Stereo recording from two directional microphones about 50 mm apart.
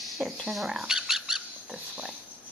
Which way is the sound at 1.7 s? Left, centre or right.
Right.